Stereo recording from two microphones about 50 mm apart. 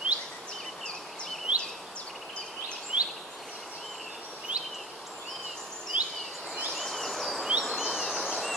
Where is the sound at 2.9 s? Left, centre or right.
Right.